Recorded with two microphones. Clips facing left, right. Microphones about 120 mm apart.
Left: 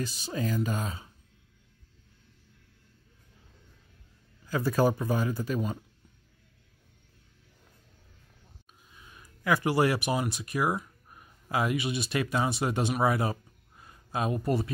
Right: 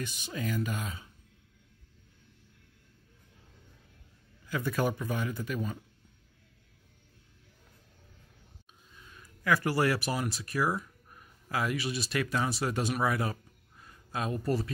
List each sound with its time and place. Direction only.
0.0 s speech: 35° left (ahead or behind)
4.5 s speech: 35° left (ahead or behind)
9.1 s speech: 20° left (ahead or behind)